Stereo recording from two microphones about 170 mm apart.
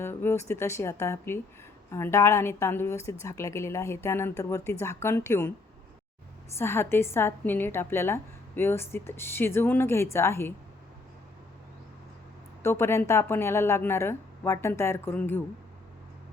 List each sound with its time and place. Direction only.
0.0 s a woman's voice: 15° left (ahead or behind)
6.6 s a woman's voice: 15° left (ahead or behind)
12.6 s a woman's voice: 15° left (ahead or behind)